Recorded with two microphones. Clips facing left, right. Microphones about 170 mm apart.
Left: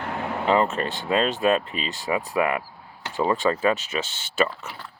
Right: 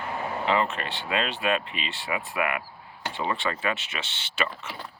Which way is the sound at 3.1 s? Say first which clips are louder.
Left 7 dB; 40° left (ahead or behind).